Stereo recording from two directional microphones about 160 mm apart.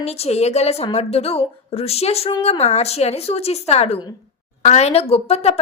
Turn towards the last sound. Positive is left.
turn(degrees=40)  # may be behind; listen again after turning